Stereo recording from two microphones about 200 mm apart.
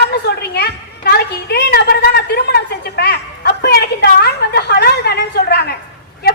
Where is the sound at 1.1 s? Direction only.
55° left (ahead or behind).